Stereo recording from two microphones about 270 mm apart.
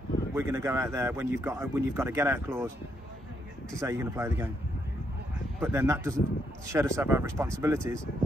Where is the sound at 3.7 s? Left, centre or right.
Centre.